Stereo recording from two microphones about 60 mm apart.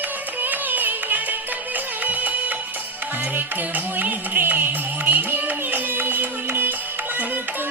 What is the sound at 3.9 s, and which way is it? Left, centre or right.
Music, right.